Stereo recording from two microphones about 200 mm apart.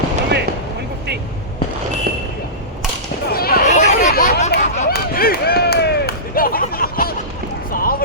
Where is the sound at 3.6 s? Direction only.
35° left (ahead or behind).